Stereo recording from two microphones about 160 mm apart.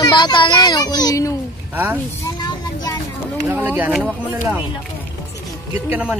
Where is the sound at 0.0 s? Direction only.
25° left (ahead or behind).